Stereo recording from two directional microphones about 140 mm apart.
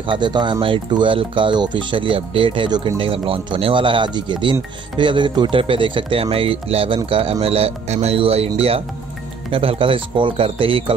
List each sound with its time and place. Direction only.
0.0 s speech: 35° right (ahead or behind)